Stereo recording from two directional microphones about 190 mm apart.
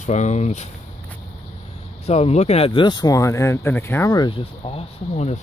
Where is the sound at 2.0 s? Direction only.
35° left (ahead or behind).